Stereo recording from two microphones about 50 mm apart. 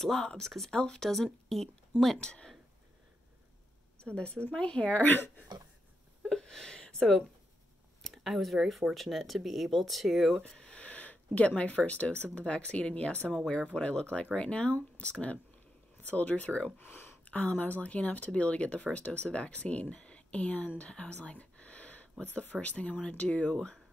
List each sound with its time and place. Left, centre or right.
0.0 s speech: centre
2.1 s speech: centre
4.0 s speech: left
6.2 s a sound: centre
8.0 s a sound: centre
8.9 s speech: centre
10.4 s speech: centre
16.8 s a sound: left
17.3 s speech: left